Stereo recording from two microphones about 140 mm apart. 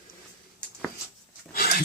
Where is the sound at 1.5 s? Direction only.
90° left.